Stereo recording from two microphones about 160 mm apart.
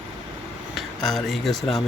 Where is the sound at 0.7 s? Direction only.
Centre (ahead or behind).